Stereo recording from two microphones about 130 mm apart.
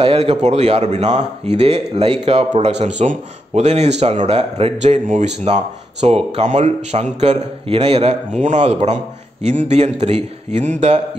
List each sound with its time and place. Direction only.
0.0 s speech: 50° right (ahead or behind)